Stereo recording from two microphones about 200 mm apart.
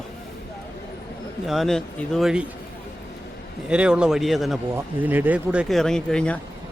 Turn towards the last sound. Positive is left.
turn(degrees=5)  # may be behind; listen again after turning